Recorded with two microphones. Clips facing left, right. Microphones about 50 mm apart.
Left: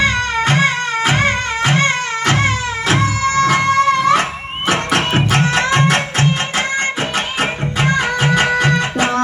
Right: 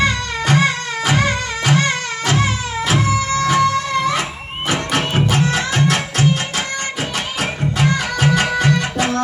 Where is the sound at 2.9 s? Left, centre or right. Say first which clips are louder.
Left 2 dB; left.